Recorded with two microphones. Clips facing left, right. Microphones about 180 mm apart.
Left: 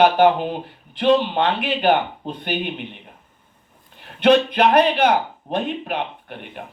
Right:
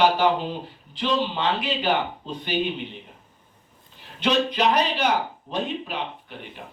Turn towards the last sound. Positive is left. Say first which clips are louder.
# left 4 dB
turn(degrees=60)  # may be behind; listen again after turning